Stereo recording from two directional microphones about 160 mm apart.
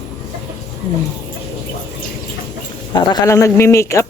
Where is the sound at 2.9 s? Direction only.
20° left (ahead or behind).